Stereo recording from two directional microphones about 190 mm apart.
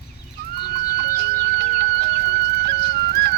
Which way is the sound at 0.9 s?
60° right (ahead or behind).